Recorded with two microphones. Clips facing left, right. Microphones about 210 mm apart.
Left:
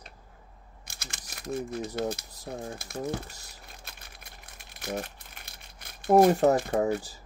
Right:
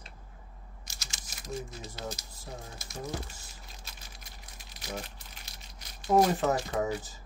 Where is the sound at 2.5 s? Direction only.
55° left (ahead or behind).